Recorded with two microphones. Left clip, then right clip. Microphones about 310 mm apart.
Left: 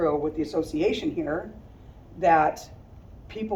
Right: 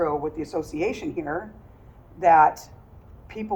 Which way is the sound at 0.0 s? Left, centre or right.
Centre.